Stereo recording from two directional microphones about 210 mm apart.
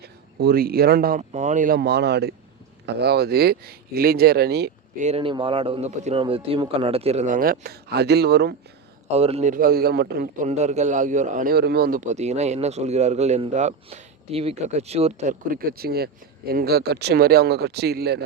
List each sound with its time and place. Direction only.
0.0 s speech: 45° right (ahead or behind)
4.9 s a man's voice: 30° right (ahead or behind); by 8.5 s 50° right (ahead or behind)
9.0 s speech: 30° right (ahead or behind); by 10.2 s 50° right (ahead or behind)
10.4 s a man's voice: 35° right (ahead or behind); by 18.2 s 50° right (ahead or behind)